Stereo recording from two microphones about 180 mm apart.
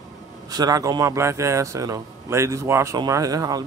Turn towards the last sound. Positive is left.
turn(degrees=-20)  # may be behind; listen again after turning